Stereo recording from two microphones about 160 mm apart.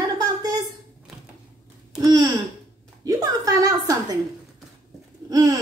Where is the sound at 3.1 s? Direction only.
20° right (ahead or behind).